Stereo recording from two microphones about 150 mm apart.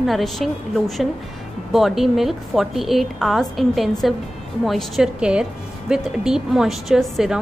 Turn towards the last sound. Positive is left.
turn(degrees=-5)  # may be behind; listen again after turning